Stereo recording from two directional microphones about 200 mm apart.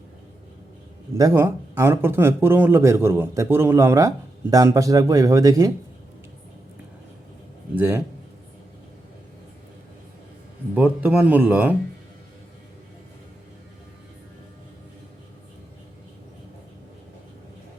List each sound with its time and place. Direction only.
1.1 s a man's voice: 15° right (ahead or behind)
7.8 s a man's voice: 10° right (ahead or behind)
10.8 s a man's voice: 10° right (ahead or behind)